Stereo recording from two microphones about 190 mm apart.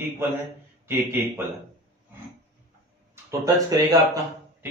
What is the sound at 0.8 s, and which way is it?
Speech, 15° right (ahead or behind).